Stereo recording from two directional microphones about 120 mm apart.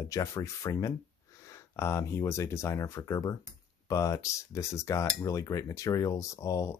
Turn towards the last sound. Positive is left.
turn(degrees=25)  # may be behind; listen again after turning